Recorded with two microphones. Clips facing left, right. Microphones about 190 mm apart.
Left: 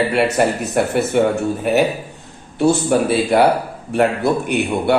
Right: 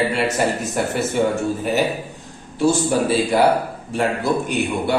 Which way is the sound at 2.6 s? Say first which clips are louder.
Left 3 dB; 60° left (ahead or behind).